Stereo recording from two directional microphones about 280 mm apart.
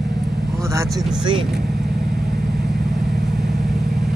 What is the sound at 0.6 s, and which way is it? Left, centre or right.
Speech, centre.